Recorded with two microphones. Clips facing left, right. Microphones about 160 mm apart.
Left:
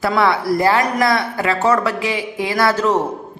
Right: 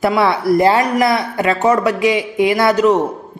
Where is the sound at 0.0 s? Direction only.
20° right (ahead or behind).